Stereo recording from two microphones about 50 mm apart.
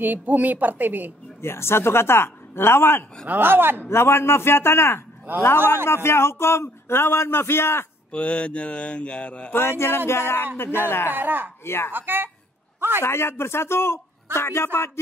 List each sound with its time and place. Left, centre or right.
0.0 s a woman's voice: right
1.4 s speech: left
3.3 s speech: right
3.9 s speech: left
8.1 s speech: left
9.5 s speech: left
11.1 s a woman's voice: right
11.6 s speech: left
11.9 s speech: right
13.0 s speech: left